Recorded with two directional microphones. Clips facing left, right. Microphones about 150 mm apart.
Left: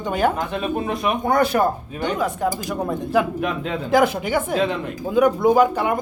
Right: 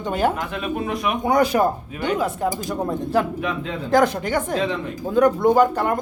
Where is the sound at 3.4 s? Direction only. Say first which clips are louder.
Left 2 dB; 50° left (ahead or behind).